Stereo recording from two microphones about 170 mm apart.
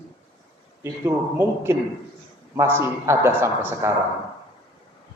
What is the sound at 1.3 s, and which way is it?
A man's voice, 15° right (ahead or behind).